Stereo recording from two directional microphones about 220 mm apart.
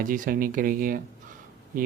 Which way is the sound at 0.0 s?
40° right (ahead or behind).